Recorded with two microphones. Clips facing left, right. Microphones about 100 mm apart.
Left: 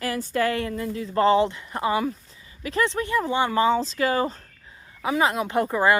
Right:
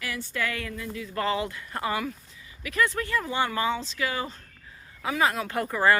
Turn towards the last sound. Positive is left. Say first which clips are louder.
# left 3 dB
turn(degrees=20)  # may be behind; listen again after turning